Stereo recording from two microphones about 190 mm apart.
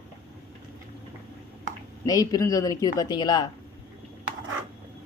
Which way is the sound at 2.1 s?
20° left (ahead or behind).